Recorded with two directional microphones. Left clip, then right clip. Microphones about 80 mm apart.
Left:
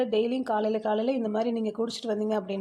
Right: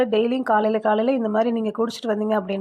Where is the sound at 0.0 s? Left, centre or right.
Right.